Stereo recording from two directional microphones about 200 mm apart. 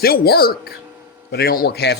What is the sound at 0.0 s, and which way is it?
A man's voice, 50° left (ahead or behind).